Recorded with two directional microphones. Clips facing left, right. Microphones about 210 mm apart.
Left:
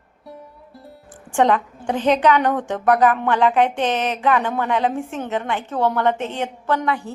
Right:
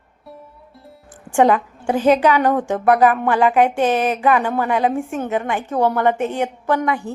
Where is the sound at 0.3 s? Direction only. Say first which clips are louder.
Left 1 dB; centre (ahead or behind).